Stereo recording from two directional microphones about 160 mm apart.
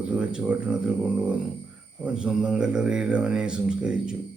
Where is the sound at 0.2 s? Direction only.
5° right (ahead or behind).